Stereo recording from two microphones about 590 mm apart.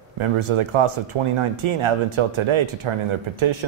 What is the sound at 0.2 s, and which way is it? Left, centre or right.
Speech, right.